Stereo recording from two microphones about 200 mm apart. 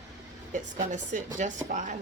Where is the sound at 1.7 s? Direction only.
40° right (ahead or behind).